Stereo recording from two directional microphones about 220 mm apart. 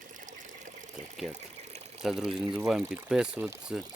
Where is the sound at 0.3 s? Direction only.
35° right (ahead or behind).